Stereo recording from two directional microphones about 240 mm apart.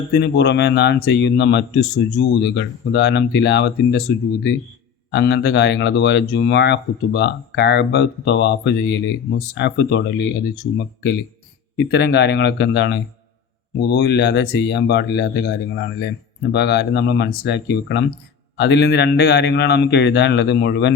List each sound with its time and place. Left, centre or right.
0.1 s speech: left